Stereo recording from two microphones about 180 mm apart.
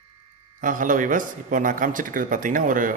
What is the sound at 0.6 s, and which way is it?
A man's voice, 45° right (ahead or behind).